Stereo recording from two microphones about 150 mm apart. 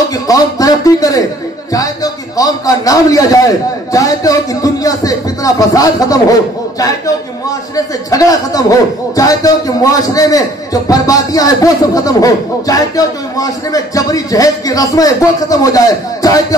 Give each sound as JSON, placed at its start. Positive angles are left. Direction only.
{"t": 0.3, "sound": "speech", "side_deg": 25}
{"t": 2.3, "sound": "a man's voice", "side_deg": 25}
{"t": 7.7, "sound": "a man's voice", "side_deg": 25}